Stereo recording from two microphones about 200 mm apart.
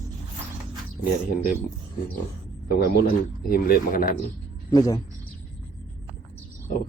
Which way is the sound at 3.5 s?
45° left (ahead or behind).